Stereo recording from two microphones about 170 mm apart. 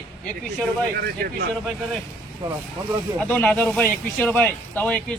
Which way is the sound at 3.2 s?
10° left (ahead or behind).